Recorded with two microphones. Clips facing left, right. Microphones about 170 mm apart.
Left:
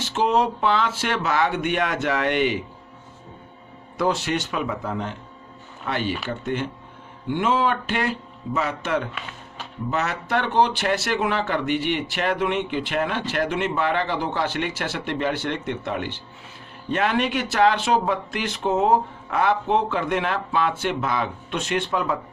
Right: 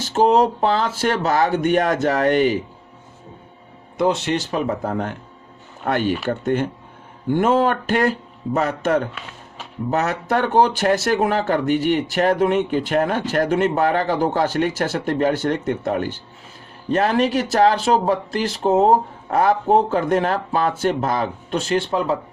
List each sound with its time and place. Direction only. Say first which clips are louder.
0.0 s speech: right 5 dB; 40° right (ahead or behind)
3.9 s speech: right 4 dB; 20° right (ahead or behind); by 9.0 s 45° right (ahead or behind)
9.1 s music: even; centre (ahead or behind)
9.9 s speech: right 4 dB; 45° right (ahead or behind)